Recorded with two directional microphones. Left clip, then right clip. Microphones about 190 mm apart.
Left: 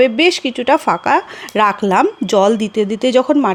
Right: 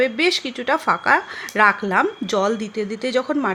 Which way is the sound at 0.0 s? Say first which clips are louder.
Left 6 dB; 30° left (ahead or behind).